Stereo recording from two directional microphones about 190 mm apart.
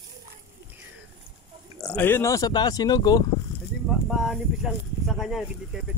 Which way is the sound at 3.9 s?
Centre (ahead or behind).